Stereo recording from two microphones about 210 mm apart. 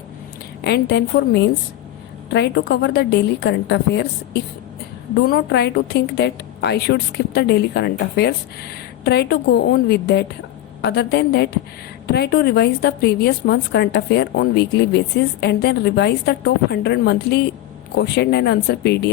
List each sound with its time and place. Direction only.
0.6 s a woman's voice: 55° left (ahead or behind)
5.2 s a woman's voice: 50° left (ahead or behind)